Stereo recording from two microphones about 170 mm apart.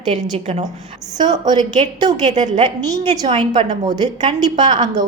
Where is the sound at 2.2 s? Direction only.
40° right (ahead or behind).